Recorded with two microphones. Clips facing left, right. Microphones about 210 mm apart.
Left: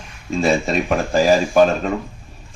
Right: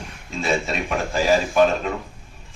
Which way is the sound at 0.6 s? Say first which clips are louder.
Left 6 dB; 40° left (ahead or behind).